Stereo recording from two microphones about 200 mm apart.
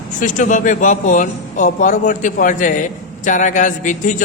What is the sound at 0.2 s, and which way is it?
A man's voice, 40° left (ahead or behind).